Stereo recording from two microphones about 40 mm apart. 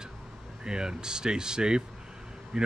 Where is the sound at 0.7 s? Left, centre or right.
Centre.